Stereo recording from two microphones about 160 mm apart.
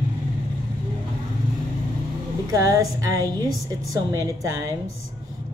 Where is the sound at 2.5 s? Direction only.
20° right (ahead or behind).